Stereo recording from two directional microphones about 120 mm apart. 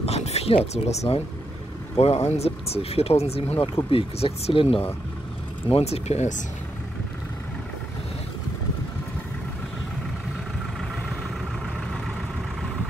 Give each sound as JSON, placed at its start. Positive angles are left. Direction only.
{"t": 0.0, "sound": "speech", "side_deg": 60}